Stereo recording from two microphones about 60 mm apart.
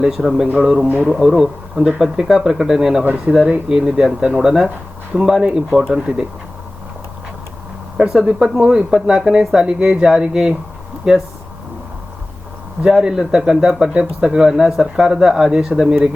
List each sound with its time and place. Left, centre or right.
0.0 s speech: centre
0.4 s speech: right
1.0 s speech: centre
6.1 s speech: right
7.9 s speech: centre
12.8 s speech: centre